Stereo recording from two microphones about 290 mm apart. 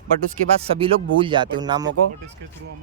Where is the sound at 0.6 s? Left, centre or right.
Centre.